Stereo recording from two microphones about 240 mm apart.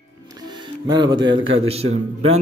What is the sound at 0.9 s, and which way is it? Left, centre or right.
Speech, centre.